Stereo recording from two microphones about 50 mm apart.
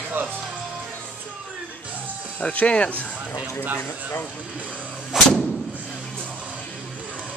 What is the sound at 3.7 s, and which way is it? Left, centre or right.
Speech, left.